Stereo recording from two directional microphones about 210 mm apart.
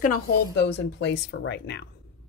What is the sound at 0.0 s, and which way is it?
Speech, 45° left (ahead or behind).